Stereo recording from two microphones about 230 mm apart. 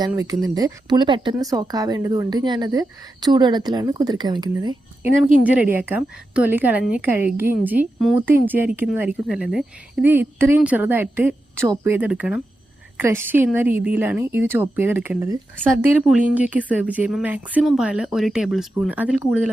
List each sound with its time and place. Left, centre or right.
0.1 s speech: centre
5.4 s speech: centre